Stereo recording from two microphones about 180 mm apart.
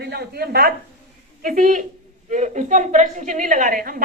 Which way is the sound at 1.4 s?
45° right (ahead or behind).